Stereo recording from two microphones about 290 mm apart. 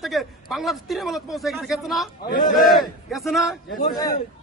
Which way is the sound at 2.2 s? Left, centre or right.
Left.